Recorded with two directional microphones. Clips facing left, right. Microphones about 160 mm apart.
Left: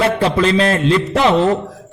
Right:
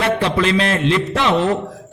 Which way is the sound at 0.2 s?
35° left (ahead or behind).